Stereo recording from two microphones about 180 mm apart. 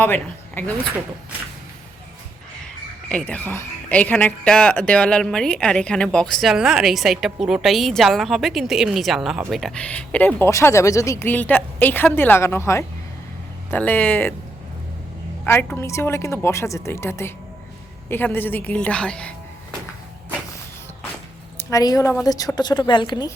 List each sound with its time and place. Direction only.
0.0 s speech: 10° left (ahead or behind)
3.1 s speech: 5° left (ahead or behind)
15.4 s speech: 10° left (ahead or behind)
21.6 s a woman's voice: 20° left (ahead or behind)